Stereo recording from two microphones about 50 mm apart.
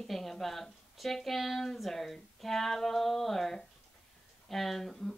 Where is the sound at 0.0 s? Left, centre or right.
Centre.